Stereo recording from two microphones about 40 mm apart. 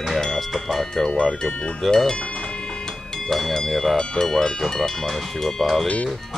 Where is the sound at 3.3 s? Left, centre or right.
Centre.